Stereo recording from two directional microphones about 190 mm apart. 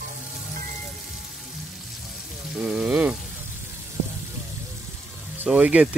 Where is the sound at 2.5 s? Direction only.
5° right (ahead or behind).